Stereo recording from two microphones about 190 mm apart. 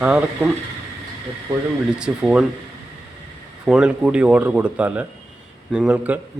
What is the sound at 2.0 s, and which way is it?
Speech, 5° right (ahead or behind).